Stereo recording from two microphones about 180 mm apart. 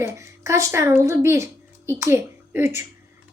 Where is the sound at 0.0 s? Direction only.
15° right (ahead or behind).